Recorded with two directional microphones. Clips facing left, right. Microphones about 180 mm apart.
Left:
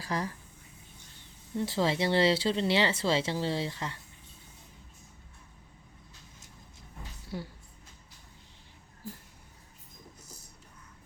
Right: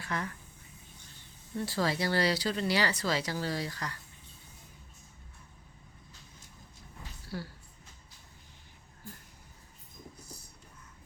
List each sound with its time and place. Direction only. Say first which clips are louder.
0.0 s speech: left 3 dB; 35° left (ahead or behind)
1.5 s speech: left 3 dB; 20° left (ahead or behind)
7.3 s speech: left 1 dB; 20° left (ahead or behind)